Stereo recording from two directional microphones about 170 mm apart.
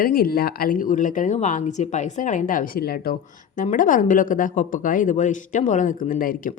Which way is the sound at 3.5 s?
50° left (ahead or behind).